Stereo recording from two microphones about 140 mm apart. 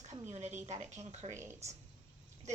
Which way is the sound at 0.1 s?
55° right (ahead or behind).